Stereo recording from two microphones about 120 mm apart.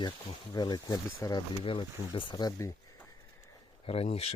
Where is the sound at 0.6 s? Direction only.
35° left (ahead or behind).